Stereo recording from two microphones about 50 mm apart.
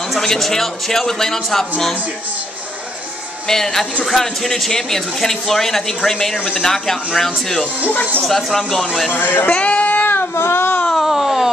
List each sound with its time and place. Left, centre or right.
0.1 s speech: centre
3.4 s speech: centre
9.1 s speech: left
9.5 s a sound: left
10.3 s baby cry: left
11.0 s a sound: centre